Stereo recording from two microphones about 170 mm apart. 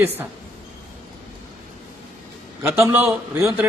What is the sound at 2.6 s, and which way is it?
A man's voice, 15° right (ahead or behind).